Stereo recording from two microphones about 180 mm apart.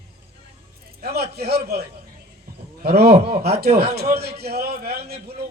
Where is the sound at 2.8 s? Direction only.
60° right (ahead or behind).